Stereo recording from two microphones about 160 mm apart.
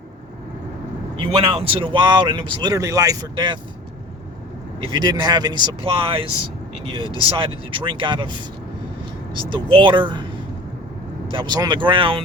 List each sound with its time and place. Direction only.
1.4 s speech: 35° right (ahead or behind)
4.9 s speech: 25° right (ahead or behind)
11.3 s speech: 30° right (ahead or behind)